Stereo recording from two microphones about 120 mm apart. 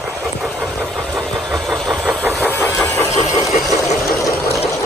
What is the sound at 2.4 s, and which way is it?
Vehicle, 15° left (ahead or behind).